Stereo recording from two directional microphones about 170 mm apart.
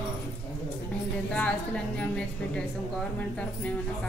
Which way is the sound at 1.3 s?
5° left (ahead or behind).